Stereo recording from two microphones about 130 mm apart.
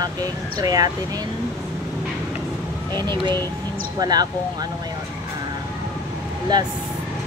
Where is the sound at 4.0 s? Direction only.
30° right (ahead or behind).